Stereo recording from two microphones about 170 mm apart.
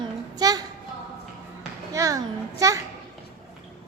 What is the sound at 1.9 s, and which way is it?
Speech, 20° right (ahead or behind).